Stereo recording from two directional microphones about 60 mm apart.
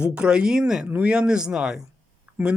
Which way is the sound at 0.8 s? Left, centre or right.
Right.